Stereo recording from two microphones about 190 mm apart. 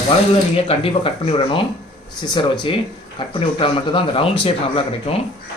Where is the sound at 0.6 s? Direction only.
30° left (ahead or behind).